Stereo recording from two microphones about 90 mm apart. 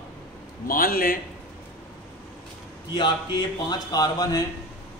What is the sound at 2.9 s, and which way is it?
Speech, 60° left (ahead or behind).